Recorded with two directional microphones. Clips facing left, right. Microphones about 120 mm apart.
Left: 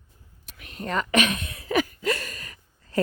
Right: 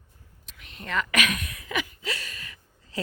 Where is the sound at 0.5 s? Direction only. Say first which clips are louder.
Left 2 dB; 50° left (ahead or behind).